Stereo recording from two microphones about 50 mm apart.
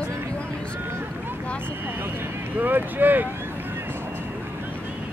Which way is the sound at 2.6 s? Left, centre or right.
Right.